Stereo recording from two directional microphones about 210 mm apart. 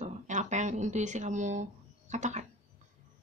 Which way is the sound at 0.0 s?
35° right (ahead or behind).